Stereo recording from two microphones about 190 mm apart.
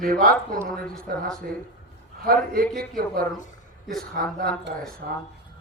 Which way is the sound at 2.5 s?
50° right (ahead or behind).